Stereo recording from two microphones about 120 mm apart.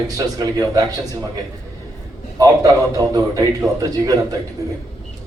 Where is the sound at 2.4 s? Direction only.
30° right (ahead or behind).